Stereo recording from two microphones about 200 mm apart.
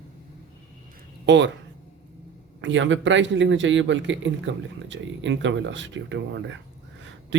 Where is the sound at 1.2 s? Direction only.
60° right (ahead or behind).